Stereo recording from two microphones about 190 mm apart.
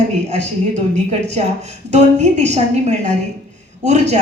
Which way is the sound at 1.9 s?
35° right (ahead or behind).